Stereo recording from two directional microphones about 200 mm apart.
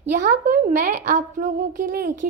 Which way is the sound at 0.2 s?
45° right (ahead or behind).